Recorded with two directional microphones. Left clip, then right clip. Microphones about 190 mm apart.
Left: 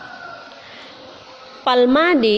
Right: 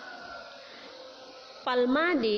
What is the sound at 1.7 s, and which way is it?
Speech, 40° left (ahead or behind).